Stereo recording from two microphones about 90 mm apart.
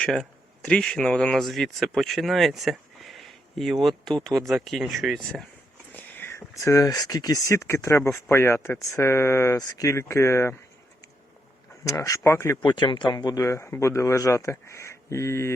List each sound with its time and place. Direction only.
0.6 s speech: 10° left (ahead or behind)
5.9 s speech: 20° left (ahead or behind); by 7.4 s 45° left (ahead or behind)
7.4 s speech: 30° left (ahead or behind)
9.6 s speech: 45° left (ahead or behind)
9.9 s speech: 30° left (ahead or behind)
11.9 s speech: 40° left (ahead or behind)
12.6 s speech: 65° left (ahead or behind)
13.1 s speech: 45° left (ahead or behind)